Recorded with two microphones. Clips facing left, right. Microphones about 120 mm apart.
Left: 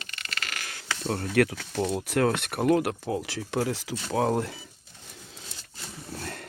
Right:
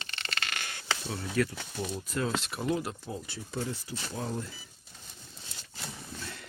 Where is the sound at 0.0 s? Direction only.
30° right (ahead or behind).